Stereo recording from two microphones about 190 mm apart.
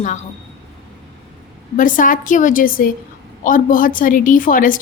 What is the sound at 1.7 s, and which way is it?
A woman's voice, 45° left (ahead or behind).